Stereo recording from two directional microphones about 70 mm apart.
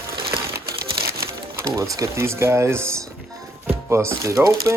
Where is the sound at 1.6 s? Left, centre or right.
Right.